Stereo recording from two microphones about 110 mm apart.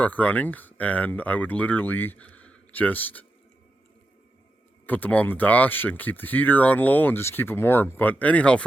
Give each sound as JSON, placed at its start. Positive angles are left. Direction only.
{"t": 0.0, "sound": "speech", "side_deg": 15}
{"t": 4.9, "sound": "speech", "side_deg": 15}